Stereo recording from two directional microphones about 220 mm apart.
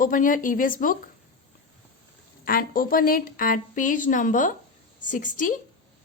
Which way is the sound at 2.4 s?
40° left (ahead or behind).